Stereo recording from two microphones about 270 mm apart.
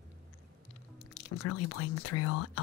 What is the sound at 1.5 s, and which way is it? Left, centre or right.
Speech, left.